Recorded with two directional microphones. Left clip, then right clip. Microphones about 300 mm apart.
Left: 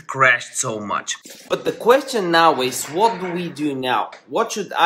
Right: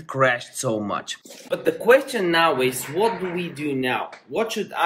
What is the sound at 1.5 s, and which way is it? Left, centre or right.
Speech, centre.